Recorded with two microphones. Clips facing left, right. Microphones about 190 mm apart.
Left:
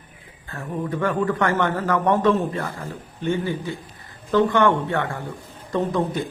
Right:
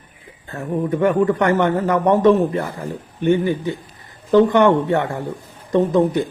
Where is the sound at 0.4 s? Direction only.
20° right (ahead or behind).